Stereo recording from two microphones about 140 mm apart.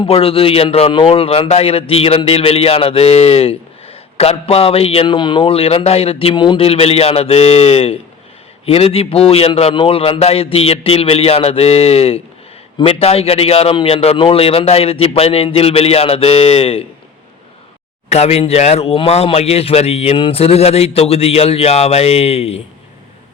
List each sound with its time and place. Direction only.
0.0 s a man's voice: 40° left (ahead or behind)
18.1 s a man's voice: 50° left (ahead or behind)